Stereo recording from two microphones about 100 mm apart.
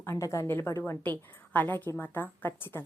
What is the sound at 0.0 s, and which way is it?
A woman's voice, 30° left (ahead or behind).